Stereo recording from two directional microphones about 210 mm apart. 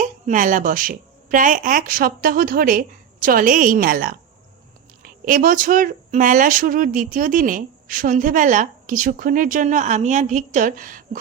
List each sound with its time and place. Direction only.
0.0 s speech: 40° right (ahead or behind)